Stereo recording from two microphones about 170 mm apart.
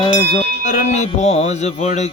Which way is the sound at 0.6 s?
45° left (ahead or behind).